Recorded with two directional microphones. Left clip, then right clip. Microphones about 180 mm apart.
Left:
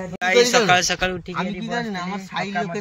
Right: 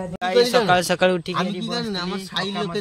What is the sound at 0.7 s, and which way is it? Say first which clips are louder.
Speech: right 2 dB; 55° right (ahead or behind).